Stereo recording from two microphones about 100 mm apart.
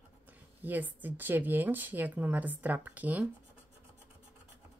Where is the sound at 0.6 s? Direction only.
15° right (ahead or behind).